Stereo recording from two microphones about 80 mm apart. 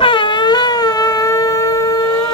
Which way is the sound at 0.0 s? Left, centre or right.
Left.